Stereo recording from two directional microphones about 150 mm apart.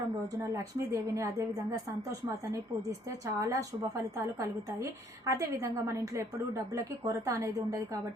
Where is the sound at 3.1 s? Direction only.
20° right (ahead or behind).